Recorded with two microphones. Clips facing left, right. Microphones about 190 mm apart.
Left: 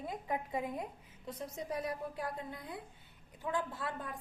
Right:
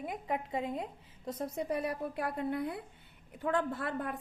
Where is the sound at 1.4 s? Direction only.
60° right (ahead or behind).